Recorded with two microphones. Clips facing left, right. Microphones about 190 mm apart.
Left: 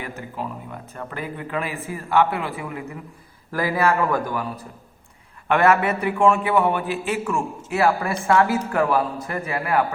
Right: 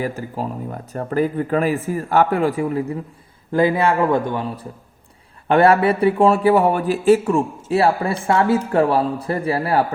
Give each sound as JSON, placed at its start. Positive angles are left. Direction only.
{"t": 0.0, "sound": "a man's voice", "side_deg": -35}
{"t": 3.5, "sound": "a man's voice", "side_deg": -25}